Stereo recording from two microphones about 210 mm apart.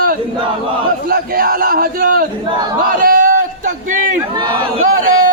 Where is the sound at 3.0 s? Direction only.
40° right (ahead or behind).